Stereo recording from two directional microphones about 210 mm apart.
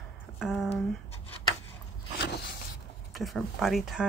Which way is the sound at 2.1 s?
55° left (ahead or behind).